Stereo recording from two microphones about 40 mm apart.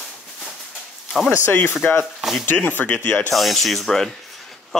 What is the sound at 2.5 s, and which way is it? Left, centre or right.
Speech, left.